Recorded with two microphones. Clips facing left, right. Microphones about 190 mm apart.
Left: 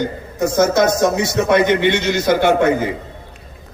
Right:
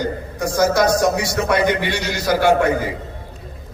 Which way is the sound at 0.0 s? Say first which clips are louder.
Left 3 dB; 25° left (ahead or behind).